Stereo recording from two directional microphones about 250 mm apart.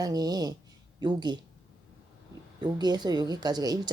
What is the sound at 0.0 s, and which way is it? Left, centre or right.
A woman's voice, centre.